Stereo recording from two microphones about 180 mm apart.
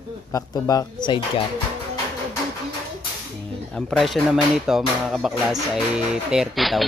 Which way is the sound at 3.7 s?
Centre (ahead or behind).